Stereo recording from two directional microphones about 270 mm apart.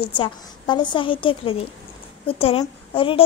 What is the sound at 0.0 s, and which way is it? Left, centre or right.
A woman's voice, centre.